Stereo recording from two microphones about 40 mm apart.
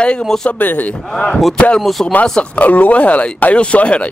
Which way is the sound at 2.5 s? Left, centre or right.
Left.